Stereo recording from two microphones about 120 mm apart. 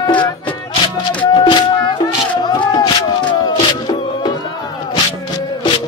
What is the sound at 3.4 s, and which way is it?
Music, 40° left (ahead or behind).